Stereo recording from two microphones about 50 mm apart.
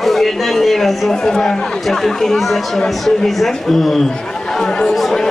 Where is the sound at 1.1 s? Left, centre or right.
Centre.